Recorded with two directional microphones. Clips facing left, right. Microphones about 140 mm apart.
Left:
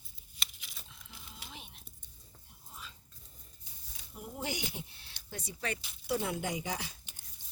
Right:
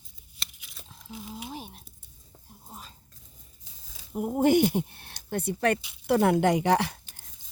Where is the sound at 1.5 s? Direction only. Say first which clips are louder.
Right 11 dB; 40° right (ahead or behind).